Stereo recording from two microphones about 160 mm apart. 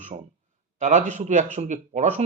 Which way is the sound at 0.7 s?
50° right (ahead or behind).